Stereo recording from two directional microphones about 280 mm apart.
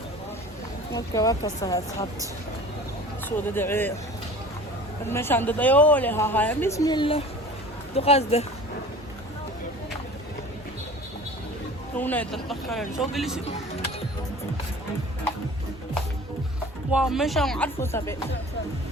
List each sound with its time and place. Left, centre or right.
0.9 s speech: centre
3.2 s speech: centre
5.0 s speech: centre
11.9 s speech: centre
16.9 s speech: centre